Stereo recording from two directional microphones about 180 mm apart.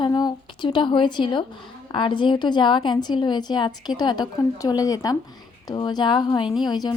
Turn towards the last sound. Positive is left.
turn(degrees=25)  # may be behind; listen again after turning